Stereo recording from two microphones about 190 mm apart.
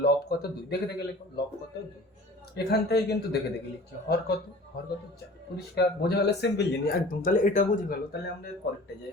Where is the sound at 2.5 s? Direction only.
60° left (ahead or behind).